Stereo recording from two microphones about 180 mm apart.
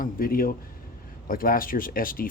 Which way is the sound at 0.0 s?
50° left (ahead or behind).